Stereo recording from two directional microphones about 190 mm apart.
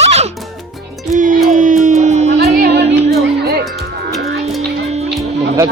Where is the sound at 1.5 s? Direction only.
40° right (ahead or behind).